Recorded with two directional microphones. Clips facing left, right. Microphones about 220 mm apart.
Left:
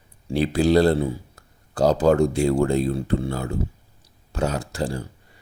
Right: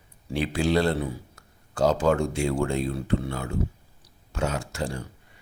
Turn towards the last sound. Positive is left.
turn(degrees=35)  # may be behind; listen again after turning